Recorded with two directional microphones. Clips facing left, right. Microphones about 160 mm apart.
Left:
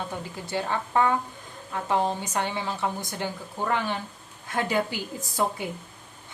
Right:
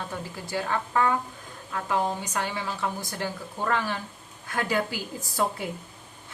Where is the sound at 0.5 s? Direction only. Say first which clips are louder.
Left 1 dB; 25° left (ahead or behind).